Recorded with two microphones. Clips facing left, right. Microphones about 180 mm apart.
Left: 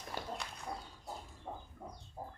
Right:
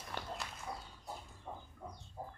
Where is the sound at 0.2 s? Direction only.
10° left (ahead or behind).